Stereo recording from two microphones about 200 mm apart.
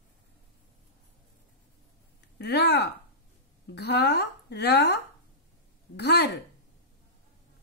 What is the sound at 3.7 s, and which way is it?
Speech, 55° left (ahead or behind).